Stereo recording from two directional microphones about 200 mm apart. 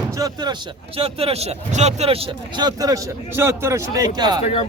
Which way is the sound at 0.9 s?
30° right (ahead or behind).